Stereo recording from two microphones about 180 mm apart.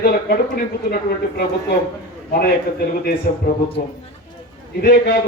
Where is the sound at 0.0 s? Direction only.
60° left (ahead or behind).